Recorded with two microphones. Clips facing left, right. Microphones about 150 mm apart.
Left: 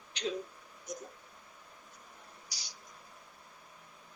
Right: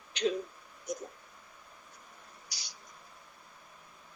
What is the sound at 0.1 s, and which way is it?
Speech, 60° right (ahead or behind).